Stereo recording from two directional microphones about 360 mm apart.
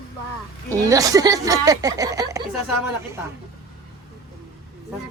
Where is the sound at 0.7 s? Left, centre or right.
Centre.